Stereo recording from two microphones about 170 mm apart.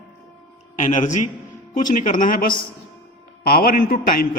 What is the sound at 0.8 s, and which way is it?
A man's voice, 45° left (ahead or behind).